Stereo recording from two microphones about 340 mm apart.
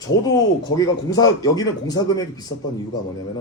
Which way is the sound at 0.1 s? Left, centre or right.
Left.